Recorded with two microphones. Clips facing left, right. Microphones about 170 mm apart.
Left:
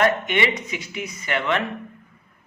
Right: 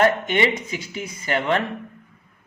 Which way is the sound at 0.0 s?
30° right (ahead or behind).